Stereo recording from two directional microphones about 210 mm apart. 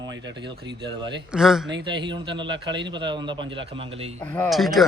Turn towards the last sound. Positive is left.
turn(degrees=0)  # may be behind; listen again after turning